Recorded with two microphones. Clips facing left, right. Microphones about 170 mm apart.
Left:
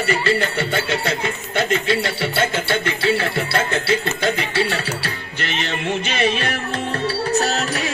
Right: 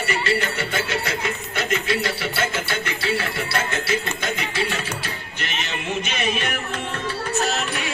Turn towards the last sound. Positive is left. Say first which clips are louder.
# left 3 dB
turn(degrees=35)  # may be behind; listen again after turning